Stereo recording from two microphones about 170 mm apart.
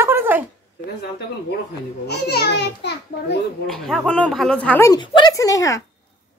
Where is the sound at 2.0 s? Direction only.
70° left (ahead or behind).